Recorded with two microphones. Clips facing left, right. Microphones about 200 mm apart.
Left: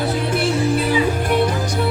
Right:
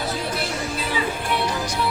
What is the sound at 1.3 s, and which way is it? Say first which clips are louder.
Music: left 5 dB; 50° left (ahead or behind).